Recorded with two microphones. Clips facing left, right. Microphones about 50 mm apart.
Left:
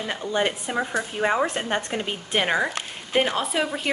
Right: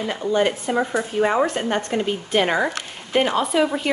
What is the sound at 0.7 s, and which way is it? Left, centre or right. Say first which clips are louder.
A woman's voice: right 4 dB; centre.